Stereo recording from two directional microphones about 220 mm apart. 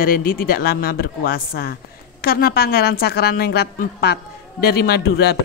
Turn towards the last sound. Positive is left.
turn(degrees=45)  # may be behind; listen again after turning